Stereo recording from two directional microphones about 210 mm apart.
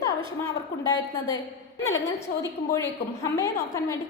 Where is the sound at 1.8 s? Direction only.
15° left (ahead or behind).